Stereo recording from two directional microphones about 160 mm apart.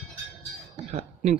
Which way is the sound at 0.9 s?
45° right (ahead or behind).